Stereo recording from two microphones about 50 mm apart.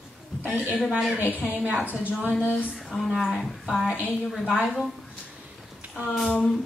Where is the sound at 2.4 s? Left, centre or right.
Left.